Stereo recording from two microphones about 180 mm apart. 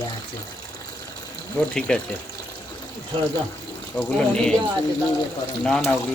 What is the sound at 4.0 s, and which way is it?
Speech, 5° left (ahead or behind).